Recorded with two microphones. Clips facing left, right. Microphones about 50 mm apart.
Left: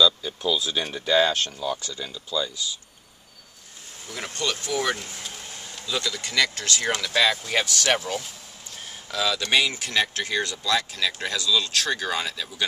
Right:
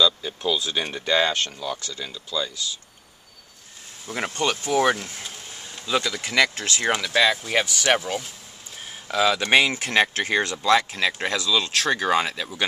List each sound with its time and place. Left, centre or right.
0.0 s speech: centre
0.6 s speech: centre
4.1 s speech: right; by 8.3 s centre
9.1 s speech: right